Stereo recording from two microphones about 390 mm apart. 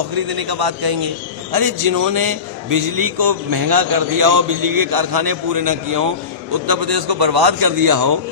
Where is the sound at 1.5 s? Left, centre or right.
Right.